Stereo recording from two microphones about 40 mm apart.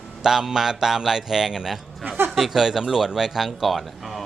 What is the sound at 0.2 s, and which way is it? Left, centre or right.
Speech, centre.